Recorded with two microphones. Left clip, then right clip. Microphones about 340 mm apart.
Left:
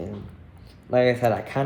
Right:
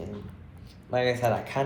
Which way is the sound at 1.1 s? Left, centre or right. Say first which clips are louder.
Left 4 dB; left.